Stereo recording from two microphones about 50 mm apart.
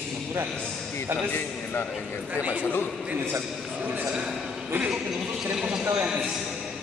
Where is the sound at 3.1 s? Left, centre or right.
Right.